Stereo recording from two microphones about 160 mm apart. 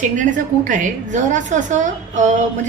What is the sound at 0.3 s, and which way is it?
A woman's voice, 55° right (ahead or behind).